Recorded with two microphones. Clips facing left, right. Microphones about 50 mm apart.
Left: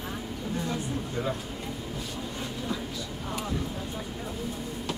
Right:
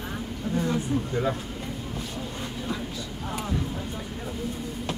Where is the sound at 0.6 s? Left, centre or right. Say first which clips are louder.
Right 5 dB; centre.